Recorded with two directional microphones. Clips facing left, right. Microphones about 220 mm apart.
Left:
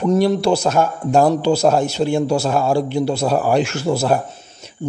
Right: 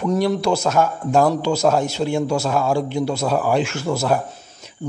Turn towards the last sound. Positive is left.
turn(degrees=30)  # may be behind; listen again after turning